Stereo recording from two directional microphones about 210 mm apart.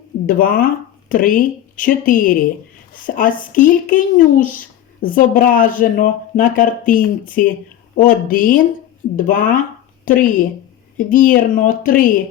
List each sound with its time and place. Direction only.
0.3 s speech: 40° left (ahead or behind)